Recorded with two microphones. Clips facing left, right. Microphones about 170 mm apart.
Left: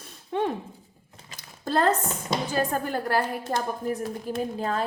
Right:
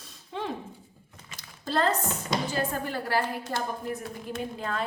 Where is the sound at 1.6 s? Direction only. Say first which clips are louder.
Left 3 dB; 55° left (ahead or behind).